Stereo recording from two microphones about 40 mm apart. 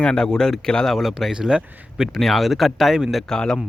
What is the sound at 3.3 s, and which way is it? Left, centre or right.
Speech, centre.